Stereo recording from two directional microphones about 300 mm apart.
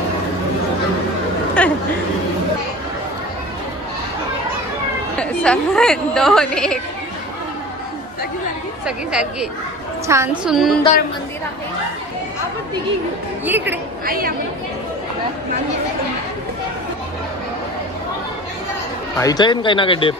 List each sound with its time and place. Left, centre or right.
1.6 s a woman's voice: centre
5.2 s a woman's voice: centre
8.8 s a woman's voice: centre
13.5 s speech: centre
14.0 s speech: right
19.1 s speech: centre